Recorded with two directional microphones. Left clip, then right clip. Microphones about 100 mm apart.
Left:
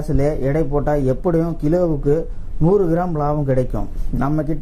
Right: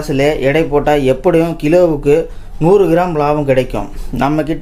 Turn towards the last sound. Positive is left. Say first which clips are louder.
# right 7 dB
turn(degrees=-30)  # may be behind; listen again after turning